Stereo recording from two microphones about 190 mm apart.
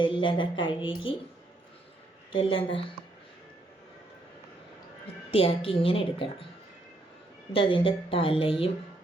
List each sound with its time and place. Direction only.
0.0 s a woman's voice: 25° left (ahead or behind)
2.3 s a woman's voice: 25° left (ahead or behind)
5.3 s a woman's voice: 30° left (ahead or behind)
7.5 s a woman's voice: 25° left (ahead or behind)